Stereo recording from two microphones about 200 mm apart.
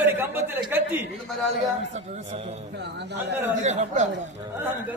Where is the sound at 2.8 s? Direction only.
60° right (ahead or behind).